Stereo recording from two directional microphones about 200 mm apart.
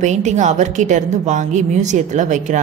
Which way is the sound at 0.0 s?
35° right (ahead or behind).